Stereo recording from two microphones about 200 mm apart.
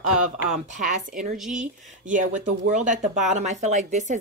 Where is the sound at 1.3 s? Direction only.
5° right (ahead or behind).